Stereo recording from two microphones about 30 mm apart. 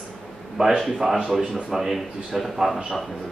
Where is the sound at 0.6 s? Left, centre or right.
Right.